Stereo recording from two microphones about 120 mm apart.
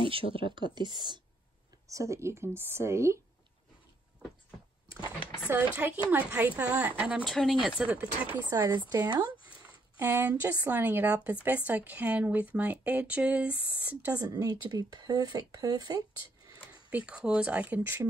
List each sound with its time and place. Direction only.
0.0 s speech: 50° right (ahead or behind)
1.9 s speech: 25° right (ahead or behind)
5.5 s speech: 15° right (ahead or behind)
7.2 s speech: centre (ahead or behind)
8.4 s speech: 35° right (ahead or behind)
9.9 s speech: 15° right (ahead or behind)
14.1 s speech: 30° right (ahead or behind)
16.9 s speech: 10° right (ahead or behind)